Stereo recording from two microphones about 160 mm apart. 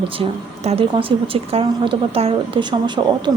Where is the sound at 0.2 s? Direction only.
40° right (ahead or behind).